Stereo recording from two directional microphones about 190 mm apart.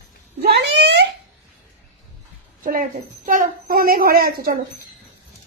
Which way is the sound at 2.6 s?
45° right (ahead or behind).